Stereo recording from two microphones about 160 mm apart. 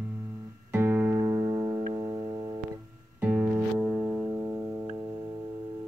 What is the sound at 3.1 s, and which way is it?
Music, 10° right (ahead or behind).